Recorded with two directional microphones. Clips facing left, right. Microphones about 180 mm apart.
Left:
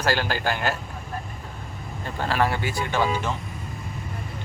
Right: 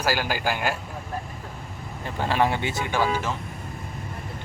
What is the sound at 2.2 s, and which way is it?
Speech, 20° right (ahead or behind).